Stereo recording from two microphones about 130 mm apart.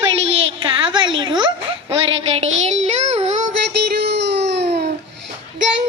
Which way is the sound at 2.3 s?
55° right (ahead or behind).